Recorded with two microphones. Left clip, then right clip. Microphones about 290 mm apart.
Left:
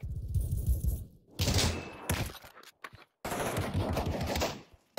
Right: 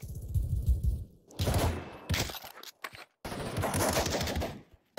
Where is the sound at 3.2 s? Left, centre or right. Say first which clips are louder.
Left 5 dB; centre.